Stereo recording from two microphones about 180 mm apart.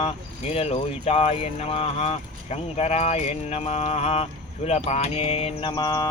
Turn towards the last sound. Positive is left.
turn(degrees=20)  # may be behind; listen again after turning